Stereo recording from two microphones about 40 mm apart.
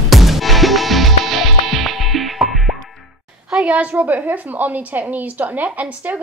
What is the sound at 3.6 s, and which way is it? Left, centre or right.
A woman's voice, right.